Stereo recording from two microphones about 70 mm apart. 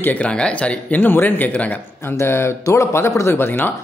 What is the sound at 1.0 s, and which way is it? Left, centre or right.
Speech, left.